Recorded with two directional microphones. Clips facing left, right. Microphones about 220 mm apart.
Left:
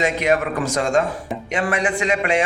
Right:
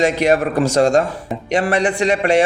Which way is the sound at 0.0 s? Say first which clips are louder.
Right 4 dB; 35° right (ahead or behind).